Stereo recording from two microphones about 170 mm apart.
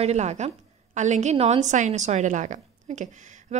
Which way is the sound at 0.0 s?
40° right (ahead or behind).